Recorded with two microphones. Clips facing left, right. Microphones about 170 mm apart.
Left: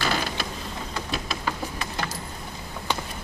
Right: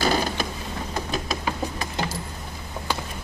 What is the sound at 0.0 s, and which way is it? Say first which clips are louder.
Mechanisms: right 4 dB; 45° right (ahead or behind).